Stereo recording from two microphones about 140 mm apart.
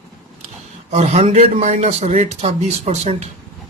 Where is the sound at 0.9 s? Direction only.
45° right (ahead or behind).